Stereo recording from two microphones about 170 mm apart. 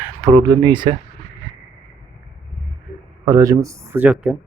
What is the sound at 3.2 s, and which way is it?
Speech, 20° right (ahead or behind).